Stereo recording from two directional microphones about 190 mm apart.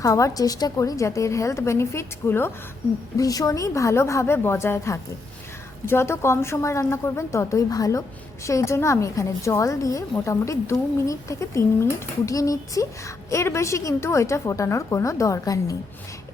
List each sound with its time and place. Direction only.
0.0 s a woman's voice: 15° left (ahead or behind)